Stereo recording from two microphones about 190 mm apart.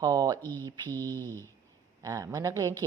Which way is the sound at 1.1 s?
10° left (ahead or behind).